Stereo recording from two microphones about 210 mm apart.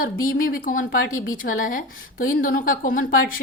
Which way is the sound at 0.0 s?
45° left (ahead or behind).